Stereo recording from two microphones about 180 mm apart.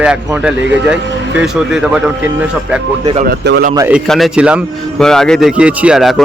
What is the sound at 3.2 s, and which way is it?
Speech, 65° right (ahead or behind).